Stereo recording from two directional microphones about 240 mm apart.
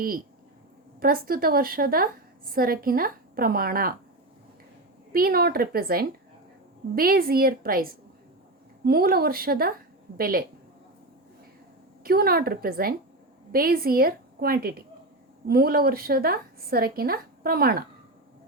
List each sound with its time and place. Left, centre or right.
0.9 s a woman's voice: right
5.1 s a woman's voice: right
12.0 s a woman's voice: right